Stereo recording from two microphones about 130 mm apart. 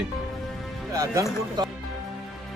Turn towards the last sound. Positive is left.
turn(degrees=-30)  # may be behind; listen again after turning